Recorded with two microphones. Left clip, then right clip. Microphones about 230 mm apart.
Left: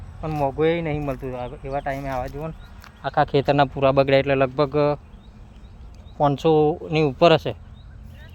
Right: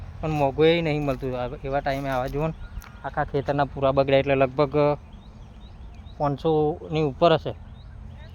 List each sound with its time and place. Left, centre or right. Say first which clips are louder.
0.2 s speech: right 1 dB; centre
3.0 s speech: left 7 dB; left; by 4.9 s centre
6.1 s speech: left 5 dB; left